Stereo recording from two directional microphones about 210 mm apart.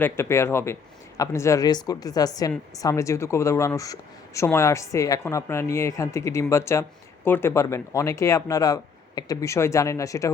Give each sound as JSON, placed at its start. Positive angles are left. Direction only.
{"t": 0.0, "sound": "speech", "side_deg": 10}